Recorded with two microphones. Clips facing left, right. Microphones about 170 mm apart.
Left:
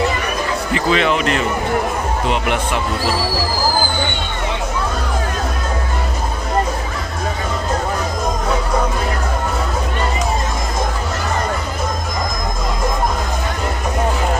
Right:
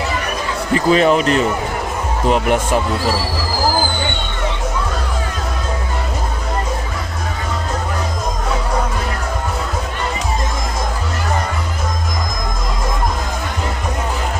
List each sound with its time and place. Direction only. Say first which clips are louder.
0.7 s speech: right 5 dB; 40° right (ahead or behind)